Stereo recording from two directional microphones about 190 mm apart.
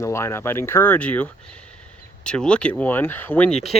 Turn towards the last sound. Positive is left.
turn(degrees=0)  # may be behind; listen again after turning